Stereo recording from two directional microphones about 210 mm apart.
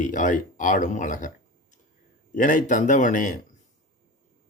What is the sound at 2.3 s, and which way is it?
Speech, 40° left (ahead or behind).